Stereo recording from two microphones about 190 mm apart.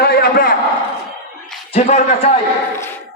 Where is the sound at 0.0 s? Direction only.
55° left (ahead or behind).